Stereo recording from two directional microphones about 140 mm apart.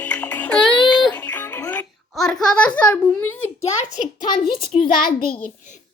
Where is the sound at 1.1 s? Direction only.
10° left (ahead or behind).